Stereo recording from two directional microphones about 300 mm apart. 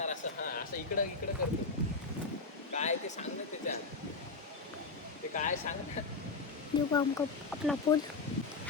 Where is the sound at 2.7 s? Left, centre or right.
Left.